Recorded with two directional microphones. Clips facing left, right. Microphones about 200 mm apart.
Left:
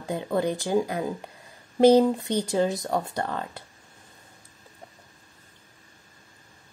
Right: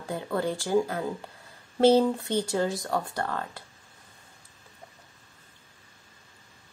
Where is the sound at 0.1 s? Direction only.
20° left (ahead or behind).